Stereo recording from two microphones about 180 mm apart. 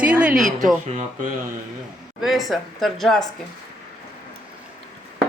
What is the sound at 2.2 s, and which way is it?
Speech, centre (ahead or behind).